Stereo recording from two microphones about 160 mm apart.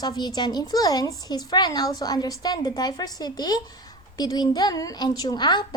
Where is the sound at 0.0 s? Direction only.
25° left (ahead or behind).